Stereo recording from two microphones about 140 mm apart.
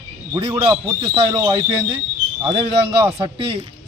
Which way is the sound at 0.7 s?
25° right (ahead or behind).